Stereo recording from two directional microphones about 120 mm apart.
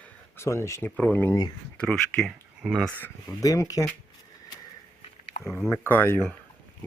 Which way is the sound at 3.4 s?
30° left (ahead or behind).